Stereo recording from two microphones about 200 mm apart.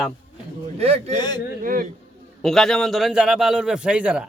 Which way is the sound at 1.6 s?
45° right (ahead or behind).